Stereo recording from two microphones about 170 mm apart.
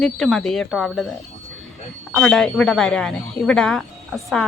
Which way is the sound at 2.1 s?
5° left (ahead or behind).